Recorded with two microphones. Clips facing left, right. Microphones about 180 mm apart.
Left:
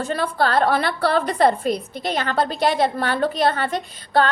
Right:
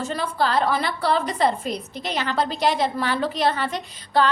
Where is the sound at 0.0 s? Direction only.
60° left (ahead or behind).